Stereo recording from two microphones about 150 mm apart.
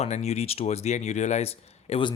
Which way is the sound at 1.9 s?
30° left (ahead or behind).